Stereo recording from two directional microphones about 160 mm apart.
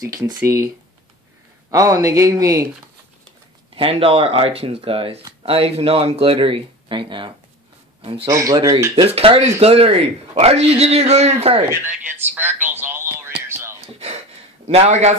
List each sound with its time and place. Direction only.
1.7 s speech: 20° right (ahead or behind)
3.7 s a man's voice: 35° right (ahead or behind)
8.3 s speech: 20° right (ahead or behind)
8.9 s a man's voice: 35° right (ahead or behind)
11.6 s speech: 15° right (ahead or behind)
12.6 s a sound: 15° right (ahead or behind)
13.5 s whispering: 15° right (ahead or behind)
13.7 s a sound: 40° right (ahead or behind)
14.7 s a man's voice: 40° right (ahead or behind)